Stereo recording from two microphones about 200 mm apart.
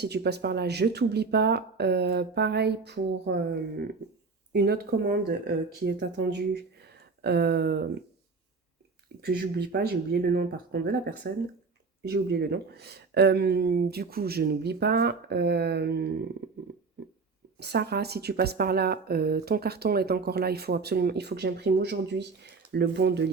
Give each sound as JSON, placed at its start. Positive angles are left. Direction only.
{"t": 0.0, "sound": "speech", "side_deg": -55}
{"t": 9.2, "sound": "speech", "side_deg": -55}
{"t": 17.6, "sound": "speech", "side_deg": -55}